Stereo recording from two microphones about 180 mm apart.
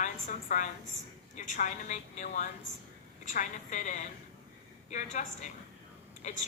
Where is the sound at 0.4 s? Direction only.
45° left (ahead or behind).